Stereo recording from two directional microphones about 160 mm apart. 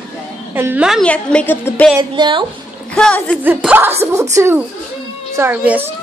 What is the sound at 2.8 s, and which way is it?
Speech, 5° left (ahead or behind).